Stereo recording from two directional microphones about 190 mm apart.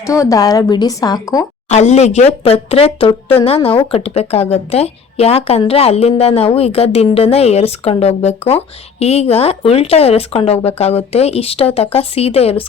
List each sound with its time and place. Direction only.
0.0 s a woman's voice: 15° left (ahead or behind)
1.7 s a woman's voice: 35° left (ahead or behind)